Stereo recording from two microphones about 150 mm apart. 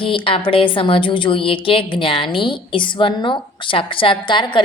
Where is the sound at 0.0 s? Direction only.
35° left (ahead or behind).